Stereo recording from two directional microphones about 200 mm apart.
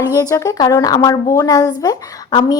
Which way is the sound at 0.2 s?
15° left (ahead or behind).